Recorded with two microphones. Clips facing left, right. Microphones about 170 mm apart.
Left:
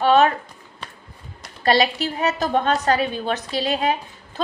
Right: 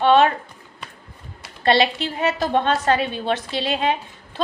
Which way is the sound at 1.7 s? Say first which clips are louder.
Right 1 dB; 25° right (ahead or behind).